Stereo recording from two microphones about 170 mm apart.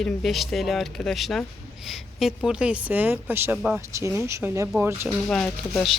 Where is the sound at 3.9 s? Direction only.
15° right (ahead or behind).